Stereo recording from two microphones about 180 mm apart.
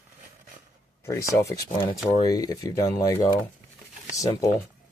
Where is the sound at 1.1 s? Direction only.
15° left (ahead or behind).